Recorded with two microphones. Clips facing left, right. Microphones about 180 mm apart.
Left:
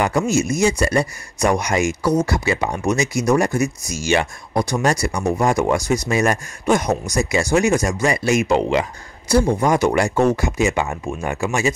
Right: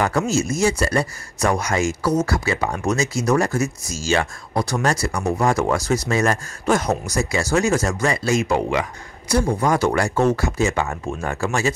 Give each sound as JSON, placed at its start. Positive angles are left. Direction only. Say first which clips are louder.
{"t": 0.3, "sound": "speech", "louder": "left 2 dB", "side_deg": 15}
{"t": 9.6, "sound": "speech", "louder": "left 2 dB", "side_deg": 15}